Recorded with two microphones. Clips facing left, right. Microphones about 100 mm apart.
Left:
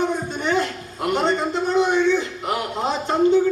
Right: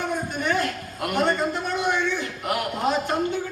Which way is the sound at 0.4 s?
20° left (ahead or behind).